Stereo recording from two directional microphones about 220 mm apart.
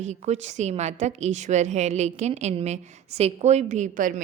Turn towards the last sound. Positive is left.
turn(degrees=-35)  # may be behind; listen again after turning